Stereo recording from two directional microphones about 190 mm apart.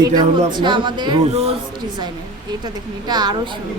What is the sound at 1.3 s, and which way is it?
Speech, 35° right (ahead or behind).